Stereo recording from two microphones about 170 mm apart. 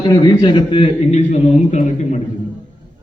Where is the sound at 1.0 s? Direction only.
45° left (ahead or behind).